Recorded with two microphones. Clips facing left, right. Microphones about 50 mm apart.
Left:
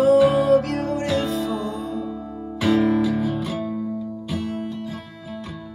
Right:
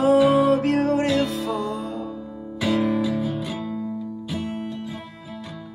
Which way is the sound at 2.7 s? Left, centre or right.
Centre.